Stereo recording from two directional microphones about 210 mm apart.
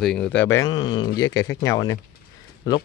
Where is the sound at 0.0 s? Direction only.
5° left (ahead or behind).